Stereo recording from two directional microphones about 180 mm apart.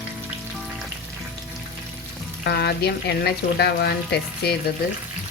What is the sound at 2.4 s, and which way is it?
Speech, 65° left (ahead or behind).